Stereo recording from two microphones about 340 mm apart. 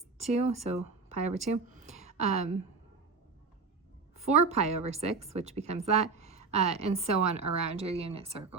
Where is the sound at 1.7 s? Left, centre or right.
Right.